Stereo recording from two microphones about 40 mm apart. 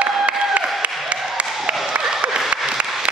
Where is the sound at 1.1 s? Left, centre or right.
Right.